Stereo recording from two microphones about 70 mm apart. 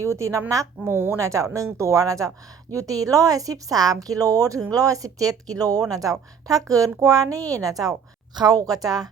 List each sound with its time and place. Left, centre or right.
0.0 s a woman's voice: right